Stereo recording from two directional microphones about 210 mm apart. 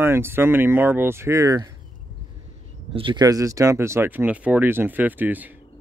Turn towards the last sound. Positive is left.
turn(degrees=-10)  # may be behind; listen again after turning